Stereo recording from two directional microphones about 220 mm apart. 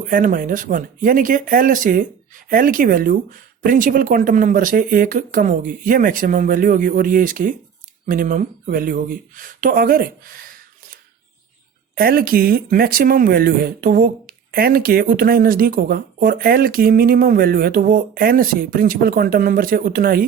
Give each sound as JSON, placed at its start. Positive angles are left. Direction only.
{"t": 0.1, "sound": "speech", "side_deg": -40}
{"t": 11.9, "sound": "speech", "side_deg": -40}